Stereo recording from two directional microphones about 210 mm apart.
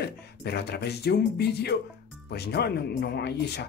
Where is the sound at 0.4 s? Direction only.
50° left (ahead or behind).